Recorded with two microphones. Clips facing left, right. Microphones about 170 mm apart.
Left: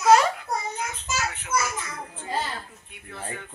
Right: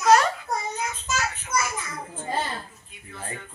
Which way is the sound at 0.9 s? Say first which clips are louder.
Right 1 dB; 65° left (ahead or behind).